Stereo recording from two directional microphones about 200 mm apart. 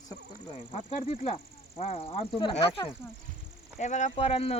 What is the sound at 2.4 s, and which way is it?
Speech, 25° left (ahead or behind).